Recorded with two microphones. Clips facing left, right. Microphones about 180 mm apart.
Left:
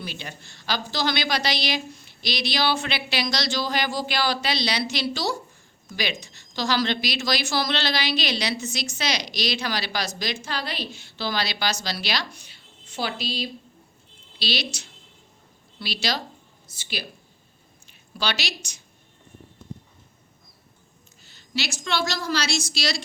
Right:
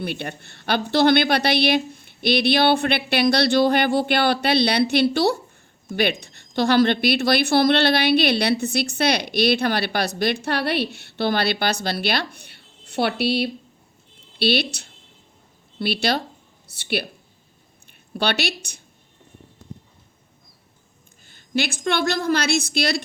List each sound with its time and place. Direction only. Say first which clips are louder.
0.0 s a woman's voice: right 8 dB; 60° right (ahead or behind)
18.1 s a woman's voice: right 6 dB; 60° right (ahead or behind)
21.2 s a woman's voice: right 7 dB; 50° right (ahead or behind)